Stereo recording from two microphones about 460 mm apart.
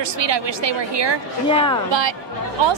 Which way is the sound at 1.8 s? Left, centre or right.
Right.